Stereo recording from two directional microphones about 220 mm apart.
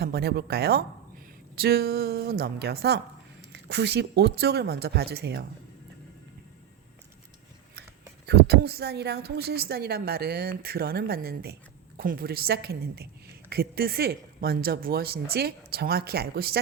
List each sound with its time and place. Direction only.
0.0 s a woman's voice: 45° right (ahead or behind)
8.3 s a woman's voice: 45° right (ahead or behind)